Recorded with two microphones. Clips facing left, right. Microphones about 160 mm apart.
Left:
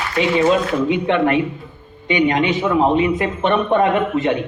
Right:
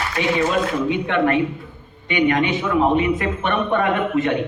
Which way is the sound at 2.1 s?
20° left (ahead or behind).